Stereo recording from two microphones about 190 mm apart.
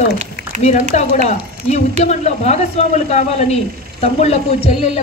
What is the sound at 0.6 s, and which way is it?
Speech, 35° left (ahead or behind).